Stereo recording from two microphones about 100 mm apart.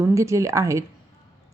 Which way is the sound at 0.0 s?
30° right (ahead or behind).